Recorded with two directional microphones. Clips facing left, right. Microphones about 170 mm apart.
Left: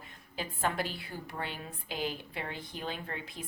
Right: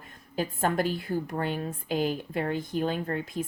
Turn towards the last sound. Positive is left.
turn(degrees=-45)  # may be behind; listen again after turning